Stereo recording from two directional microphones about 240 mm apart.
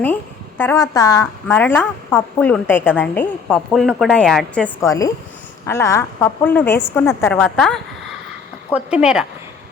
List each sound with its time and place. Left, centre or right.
0.0 s speech: centre